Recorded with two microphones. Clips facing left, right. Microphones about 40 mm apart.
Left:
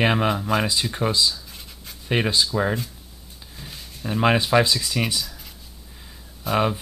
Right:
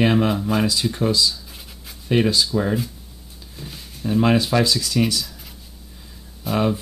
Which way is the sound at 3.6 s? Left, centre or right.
Centre.